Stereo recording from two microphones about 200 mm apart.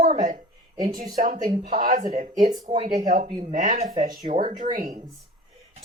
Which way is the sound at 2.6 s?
25° right (ahead or behind).